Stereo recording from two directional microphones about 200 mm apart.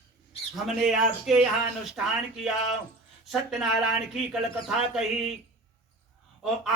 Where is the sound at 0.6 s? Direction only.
Centre (ahead or behind).